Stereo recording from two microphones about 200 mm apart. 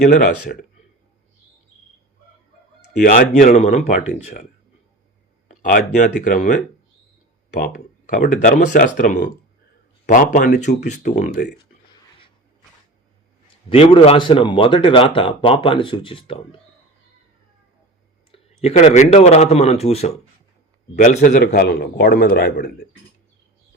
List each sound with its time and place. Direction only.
0.0 s speech: 50° left (ahead or behind)
3.0 s speech: 40° left (ahead or behind)
5.6 s speech: 40° left (ahead or behind)
7.5 s speech: 50° left (ahead or behind)
13.7 s speech: 25° left (ahead or behind)
18.3 s speech: 30° left (ahead or behind)
21.2 s speech: 50° left (ahead or behind)